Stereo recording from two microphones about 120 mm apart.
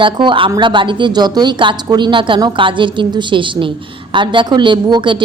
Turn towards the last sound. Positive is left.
turn(degrees=-40)  # may be behind; listen again after turning